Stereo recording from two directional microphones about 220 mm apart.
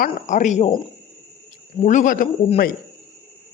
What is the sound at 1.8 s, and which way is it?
Speech, 35° left (ahead or behind).